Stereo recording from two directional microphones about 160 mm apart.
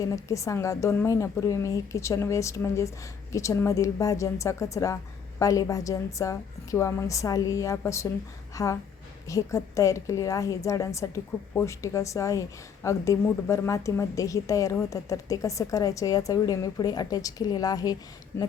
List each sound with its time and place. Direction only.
0.0 s a woman's voice: 20° left (ahead or behind)